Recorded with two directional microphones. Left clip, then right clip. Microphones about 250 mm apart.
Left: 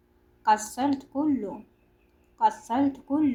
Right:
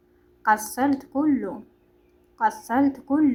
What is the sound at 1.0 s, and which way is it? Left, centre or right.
Speech, centre.